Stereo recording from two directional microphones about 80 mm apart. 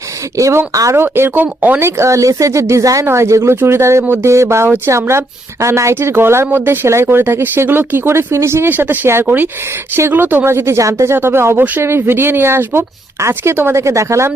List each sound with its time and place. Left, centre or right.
0.3 s a woman's voice: right
0.9 s speech: right
1.8 s a woman's voice: right